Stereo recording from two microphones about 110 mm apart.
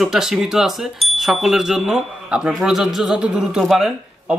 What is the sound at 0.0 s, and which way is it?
Speech, 5° right (ahead or behind).